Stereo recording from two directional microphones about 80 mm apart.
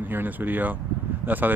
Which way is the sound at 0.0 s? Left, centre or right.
Right.